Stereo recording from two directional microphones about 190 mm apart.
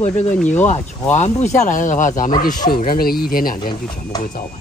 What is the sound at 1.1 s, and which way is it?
Speech, 35° left (ahead or behind).